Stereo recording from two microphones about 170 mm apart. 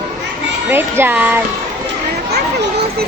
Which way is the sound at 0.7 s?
10° right (ahead or behind).